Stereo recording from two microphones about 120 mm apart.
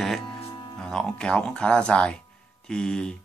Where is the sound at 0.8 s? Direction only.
5° left (ahead or behind).